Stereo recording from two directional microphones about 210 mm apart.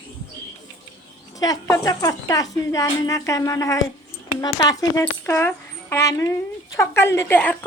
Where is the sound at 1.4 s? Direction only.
15° left (ahead or behind).